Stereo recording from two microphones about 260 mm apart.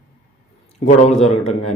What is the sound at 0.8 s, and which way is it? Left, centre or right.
Speech, left.